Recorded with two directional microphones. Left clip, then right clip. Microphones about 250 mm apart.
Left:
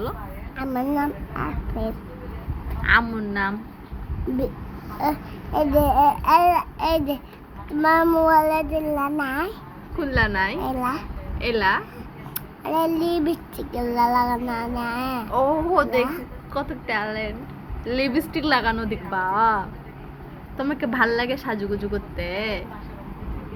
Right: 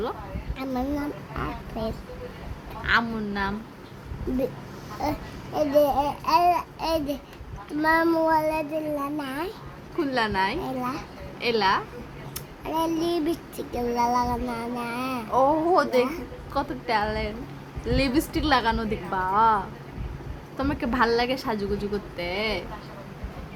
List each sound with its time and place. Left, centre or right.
0.5 s child singing: centre
2.8 s a woman's voice: centre
5.0 s child singing: centre
10.0 s a woman's voice: centre
10.6 s child singing: centre
11.3 s a woman's voice: centre
12.6 s child singing: centre
15.3 s a woman's voice: centre